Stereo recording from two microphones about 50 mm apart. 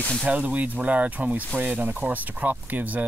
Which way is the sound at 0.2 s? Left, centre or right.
Right.